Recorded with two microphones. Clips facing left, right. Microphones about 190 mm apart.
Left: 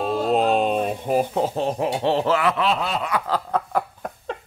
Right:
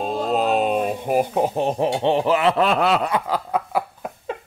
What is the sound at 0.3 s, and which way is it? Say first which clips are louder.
Speech: even; centre (ahead or behind).